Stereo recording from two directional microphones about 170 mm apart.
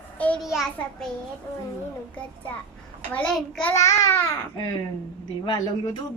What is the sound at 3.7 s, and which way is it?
Speech, 15° left (ahead or behind).